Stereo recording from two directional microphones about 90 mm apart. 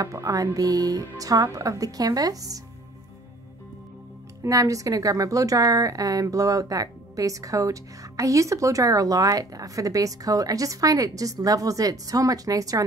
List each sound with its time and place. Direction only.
0.0 s a woman's voice: 40° right (ahead or behind)
4.4 s a woman's voice: 40° right (ahead or behind)